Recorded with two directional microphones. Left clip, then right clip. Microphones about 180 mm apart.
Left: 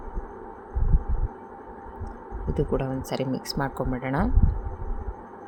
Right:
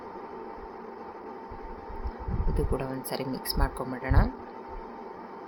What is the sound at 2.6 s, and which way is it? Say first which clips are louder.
Speech: left 5 dB; 20° left (ahead or behind).